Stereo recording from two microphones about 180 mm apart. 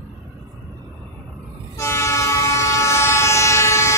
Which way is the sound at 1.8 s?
15° left (ahead or behind).